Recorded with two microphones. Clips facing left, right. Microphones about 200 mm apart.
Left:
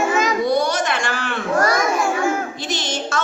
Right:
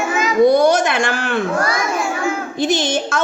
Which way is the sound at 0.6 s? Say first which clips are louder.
Right 6 dB; 50° right (ahead or behind).